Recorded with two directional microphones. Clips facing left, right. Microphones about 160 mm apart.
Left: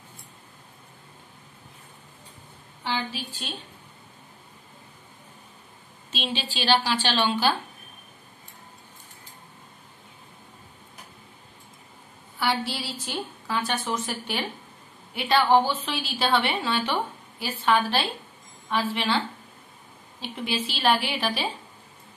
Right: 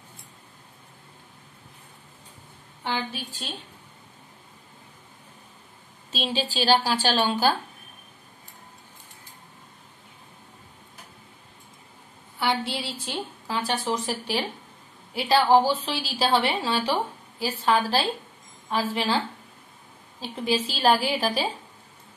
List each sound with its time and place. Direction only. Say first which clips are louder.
2.8 s a sound: even; 55° right (ahead or behind)
6.1 s a woman's voice: right 4 dB; 40° right (ahead or behind)
12.4 s a woman's voice: right 1 dB; 25° right (ahead or behind)